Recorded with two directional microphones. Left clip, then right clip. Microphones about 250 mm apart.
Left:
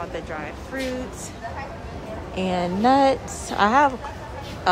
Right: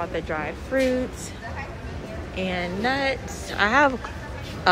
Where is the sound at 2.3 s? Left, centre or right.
Centre.